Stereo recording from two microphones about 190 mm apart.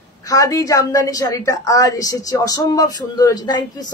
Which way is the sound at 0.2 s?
15° left (ahead or behind).